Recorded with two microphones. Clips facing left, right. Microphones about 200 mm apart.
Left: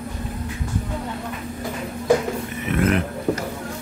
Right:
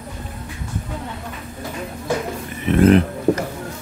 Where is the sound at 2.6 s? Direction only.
30° right (ahead or behind).